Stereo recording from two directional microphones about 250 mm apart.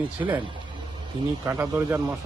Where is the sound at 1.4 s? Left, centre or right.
Centre.